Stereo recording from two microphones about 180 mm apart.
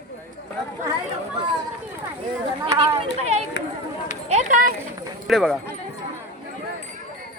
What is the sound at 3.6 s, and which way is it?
Run, 80° left.